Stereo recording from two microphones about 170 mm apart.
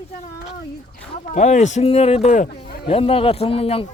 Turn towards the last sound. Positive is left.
turn(degrees=35)  # may be behind; listen again after turning